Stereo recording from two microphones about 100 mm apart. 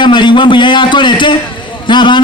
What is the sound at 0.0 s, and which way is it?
A man's voice, 50° left (ahead or behind).